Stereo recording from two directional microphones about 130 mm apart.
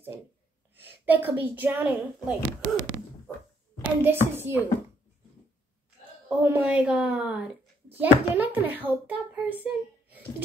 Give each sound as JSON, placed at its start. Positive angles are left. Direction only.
{"t": 0.7, "sound": "a woman's voice", "side_deg": -15}
{"t": 2.6, "sound": "a sound", "side_deg": -90}
{"t": 3.8, "sound": "a child's voice", "side_deg": -15}
{"t": 6.2, "sound": "a child's voice", "side_deg": -15}